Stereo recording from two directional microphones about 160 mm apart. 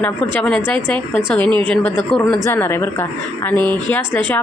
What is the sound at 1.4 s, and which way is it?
Speech, 30° right (ahead or behind).